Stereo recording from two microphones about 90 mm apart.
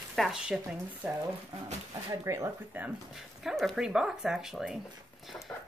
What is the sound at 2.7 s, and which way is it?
Speech, 15° right (ahead or behind).